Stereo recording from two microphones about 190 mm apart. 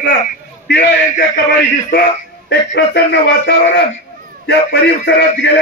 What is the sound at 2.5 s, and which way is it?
Music, 60° left (ahead or behind).